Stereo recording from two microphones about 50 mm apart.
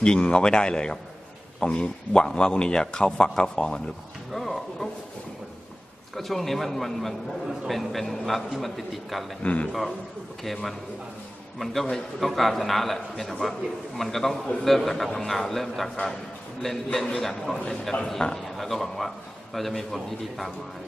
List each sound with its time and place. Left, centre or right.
0.0 s a man's voice: centre
4.3 s speech: centre
6.1 s a man's voice: centre
9.4 s a man's voice: left
10.4 s a man's voice: centre